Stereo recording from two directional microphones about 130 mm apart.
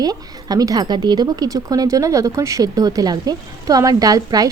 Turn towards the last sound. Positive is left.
turn(degrees=-30)  # may be behind; listen again after turning